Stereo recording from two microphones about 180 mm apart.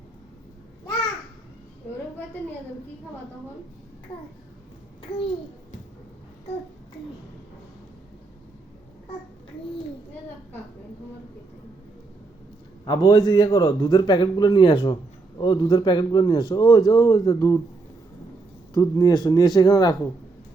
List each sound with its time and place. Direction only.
5.0 s a child's voice: 30° left (ahead or behind)
12.8 s a man's voice: 25° left (ahead or behind)
18.7 s a man's voice: 20° left (ahead or behind)